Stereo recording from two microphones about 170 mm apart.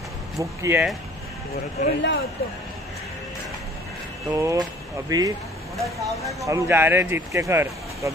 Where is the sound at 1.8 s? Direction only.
45° left (ahead or behind).